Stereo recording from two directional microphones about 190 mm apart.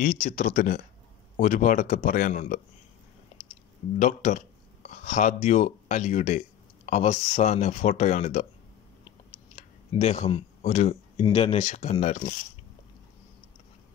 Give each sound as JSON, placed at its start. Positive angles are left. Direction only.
{"t": 0.0, "sound": "speech", "side_deg": 40}
{"t": 4.0, "sound": "speech", "side_deg": 40}
{"t": 9.6, "sound": "a sound", "side_deg": 35}
{"t": 11.2, "sound": "speech", "side_deg": 30}